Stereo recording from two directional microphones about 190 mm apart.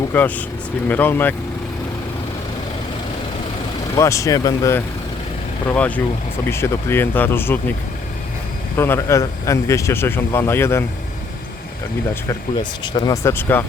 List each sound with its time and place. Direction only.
0.1 s speech: 10° left (ahead or behind)
3.9 s speech: 15° left (ahead or behind)
8.7 s speech: 10° left (ahead or behind)
12.8 s speech: 20° left (ahead or behind)